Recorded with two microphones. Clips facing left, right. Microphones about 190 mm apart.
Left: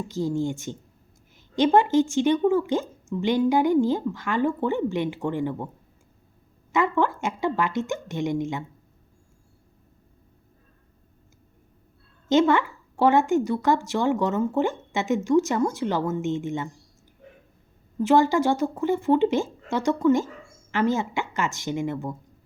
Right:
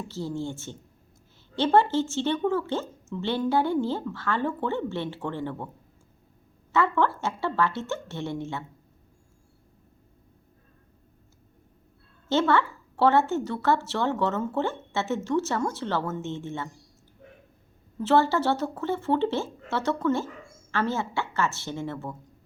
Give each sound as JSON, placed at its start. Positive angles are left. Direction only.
{"t": 0.1, "sound": "a woman's voice", "side_deg": 15}
{"t": 6.7, "sound": "a woman's voice", "side_deg": 15}
{"t": 12.3, "sound": "a woman's voice", "side_deg": 15}
{"t": 18.0, "sound": "a woman's voice", "side_deg": 15}